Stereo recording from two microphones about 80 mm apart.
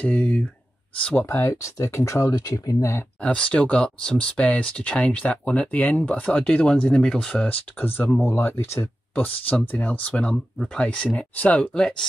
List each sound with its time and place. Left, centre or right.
0.0 s speech: centre
1.1 s speech: left
3.2 s speech: centre
7.8 s speech: left
9.1 s speech: left